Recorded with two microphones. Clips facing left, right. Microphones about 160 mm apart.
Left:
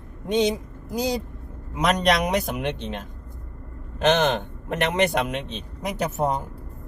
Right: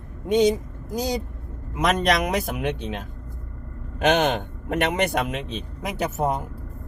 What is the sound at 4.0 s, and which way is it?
Speech, 10° right (ahead or behind).